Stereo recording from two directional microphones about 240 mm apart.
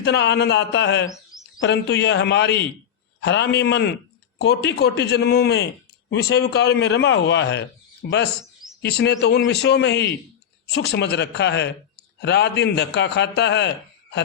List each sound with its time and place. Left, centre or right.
0.0 s a man's voice: left